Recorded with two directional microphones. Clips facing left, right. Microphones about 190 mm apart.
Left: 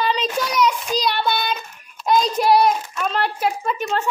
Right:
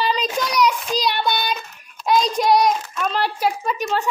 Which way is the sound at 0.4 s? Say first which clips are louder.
Right 1 dB; centre (ahead or behind).